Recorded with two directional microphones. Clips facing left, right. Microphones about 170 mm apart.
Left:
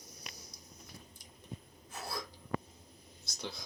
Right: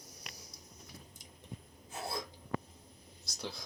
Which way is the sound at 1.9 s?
25° right (ahead or behind).